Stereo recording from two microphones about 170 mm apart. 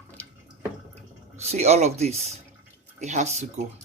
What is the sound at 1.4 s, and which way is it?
Speech, 40° right (ahead or behind).